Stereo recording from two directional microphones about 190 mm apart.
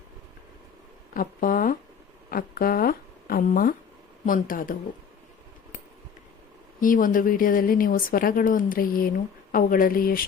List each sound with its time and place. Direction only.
1.1 s a woman's voice: 45° left (ahead or behind)
6.7 s a woman's voice: 45° left (ahead or behind)